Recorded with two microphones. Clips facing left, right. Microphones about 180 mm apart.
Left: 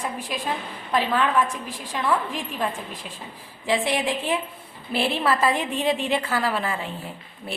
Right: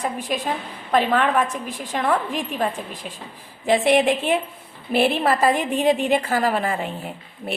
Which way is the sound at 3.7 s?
55° right (ahead or behind).